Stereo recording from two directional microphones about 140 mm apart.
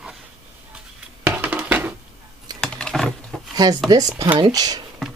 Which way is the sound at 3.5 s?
30° right (ahead or behind).